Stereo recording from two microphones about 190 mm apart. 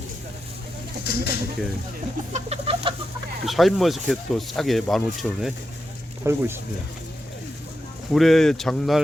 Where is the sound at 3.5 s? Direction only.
Centre (ahead or behind).